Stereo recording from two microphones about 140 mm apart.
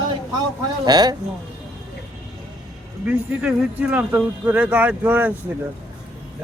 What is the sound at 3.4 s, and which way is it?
Speech, 10° right (ahead or behind).